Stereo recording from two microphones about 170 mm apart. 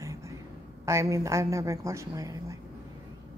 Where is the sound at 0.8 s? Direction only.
15° right (ahead or behind).